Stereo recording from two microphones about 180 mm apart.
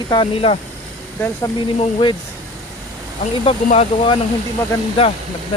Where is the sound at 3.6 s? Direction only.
35° left (ahead or behind).